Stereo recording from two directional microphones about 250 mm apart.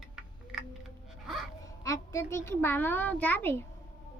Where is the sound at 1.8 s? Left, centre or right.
Centre.